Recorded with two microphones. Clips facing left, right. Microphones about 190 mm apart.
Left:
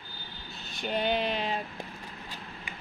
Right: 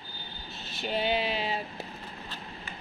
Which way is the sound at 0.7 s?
5° right (ahead or behind).